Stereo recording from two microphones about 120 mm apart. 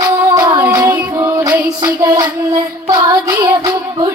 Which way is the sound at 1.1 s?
25° right (ahead or behind).